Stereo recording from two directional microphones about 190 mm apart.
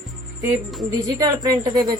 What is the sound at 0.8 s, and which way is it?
Speech, 20° right (ahead or behind).